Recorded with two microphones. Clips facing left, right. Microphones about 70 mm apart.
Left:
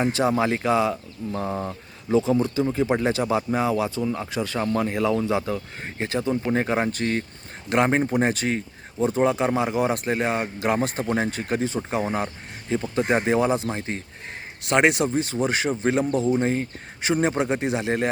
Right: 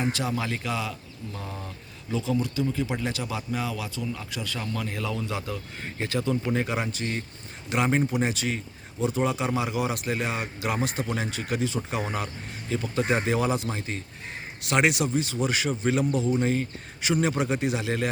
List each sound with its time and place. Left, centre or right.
0.0 s speech: left
1.4 s speech: left
7.0 s speech: left